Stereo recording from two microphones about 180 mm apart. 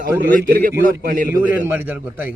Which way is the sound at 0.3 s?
50° right (ahead or behind).